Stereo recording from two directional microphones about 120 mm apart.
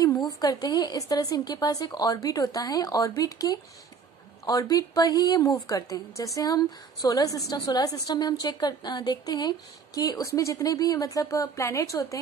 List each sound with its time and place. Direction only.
0.4 s a woman's voice: 30° left (ahead or behind)